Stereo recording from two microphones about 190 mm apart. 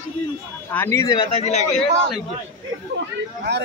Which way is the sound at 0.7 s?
15° left (ahead or behind).